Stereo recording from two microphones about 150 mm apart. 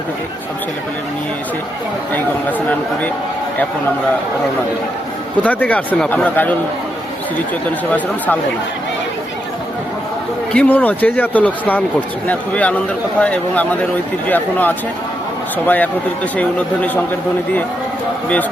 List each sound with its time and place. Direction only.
2.1 s speech: 10° left (ahead or behind)
5.4 s speech: 10° left (ahead or behind)
10.5 s speech: 10° left (ahead or behind)